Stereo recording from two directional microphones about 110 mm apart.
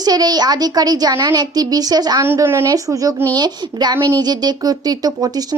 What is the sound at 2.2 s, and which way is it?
A woman's voice, 20° right (ahead or behind).